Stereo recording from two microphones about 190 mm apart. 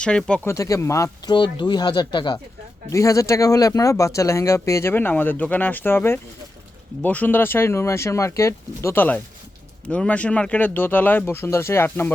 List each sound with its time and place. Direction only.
0.0 s speech: 5° left (ahead or behind)
0.5 s speech: 15° left (ahead or behind)